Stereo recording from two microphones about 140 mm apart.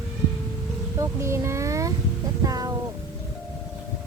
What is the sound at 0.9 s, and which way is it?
Child singing, 20° right (ahead or behind).